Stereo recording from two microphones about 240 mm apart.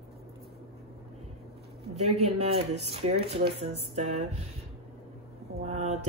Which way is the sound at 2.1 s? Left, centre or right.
Right.